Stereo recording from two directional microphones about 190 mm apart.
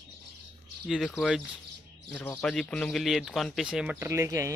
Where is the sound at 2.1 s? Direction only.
10° left (ahead or behind).